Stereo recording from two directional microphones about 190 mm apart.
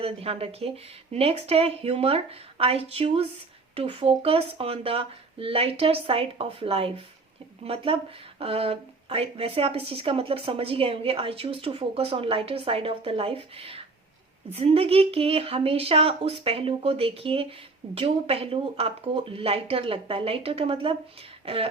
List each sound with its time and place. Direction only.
0.0 s speech: 30° right (ahead or behind)